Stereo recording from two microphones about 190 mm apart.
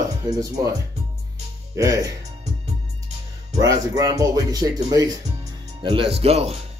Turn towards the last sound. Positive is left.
turn(degrees=-35)  # may be behind; listen again after turning